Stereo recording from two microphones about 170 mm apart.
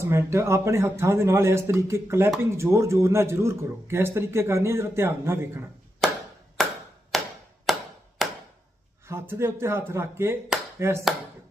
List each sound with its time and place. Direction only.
0.0 s speech: 15° right (ahead or behind)
6.0 s a sound: centre (ahead or behind)
9.0 s speech: 15° right (ahead or behind)